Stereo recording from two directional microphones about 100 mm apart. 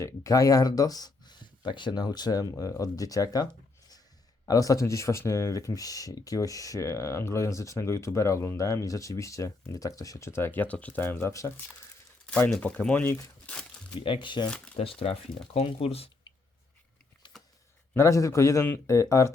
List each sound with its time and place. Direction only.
0.0 s speech: 30° left (ahead or behind)
12.2 s speech: 10° left (ahead or behind)
14.0 s speech: 60° left (ahead or behind)
14.8 s speech: 75° left (ahead or behind)
15.5 s speech: 85° left
17.2 s a sound: 55° left (ahead or behind)
17.9 s speech: 30° left (ahead or behind)